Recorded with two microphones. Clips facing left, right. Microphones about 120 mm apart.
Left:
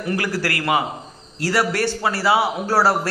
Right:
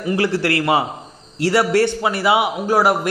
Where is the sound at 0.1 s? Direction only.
25° right (ahead or behind).